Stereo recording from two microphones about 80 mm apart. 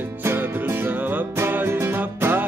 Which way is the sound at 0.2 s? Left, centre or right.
Right.